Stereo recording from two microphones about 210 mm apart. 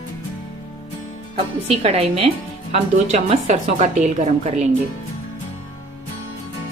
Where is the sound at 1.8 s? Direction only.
30° right (ahead or behind).